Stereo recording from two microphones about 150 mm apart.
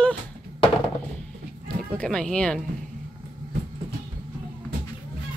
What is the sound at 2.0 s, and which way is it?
Speech, 5° left (ahead or behind).